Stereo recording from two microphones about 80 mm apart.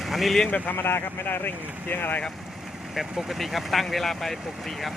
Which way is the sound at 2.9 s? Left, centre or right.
Centre.